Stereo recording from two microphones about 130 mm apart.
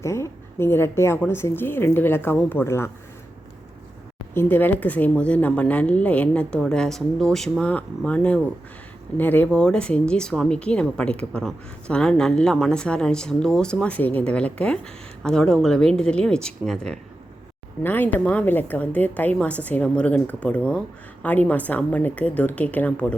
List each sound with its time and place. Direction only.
0.0 s speech: 20° left (ahead or behind)
4.4 s speech: 15° left (ahead or behind)